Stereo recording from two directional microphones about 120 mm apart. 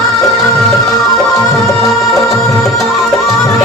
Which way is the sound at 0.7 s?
Centre (ahead or behind).